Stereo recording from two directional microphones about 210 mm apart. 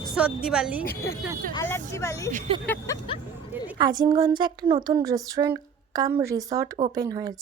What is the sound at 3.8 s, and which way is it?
Speech, 20° right (ahead or behind).